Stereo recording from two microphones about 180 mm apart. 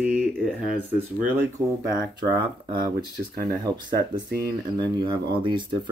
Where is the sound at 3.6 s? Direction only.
25° right (ahead or behind).